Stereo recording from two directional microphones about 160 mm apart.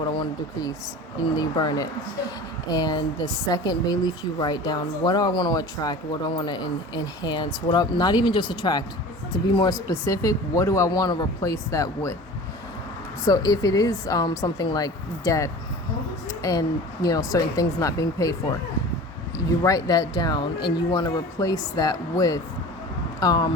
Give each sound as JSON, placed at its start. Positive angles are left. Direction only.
{"t": 0.1, "sound": "speech", "side_deg": 30}
{"t": 13.2, "sound": "speech", "side_deg": 20}
{"t": 19.6, "sound": "speech", "side_deg": 20}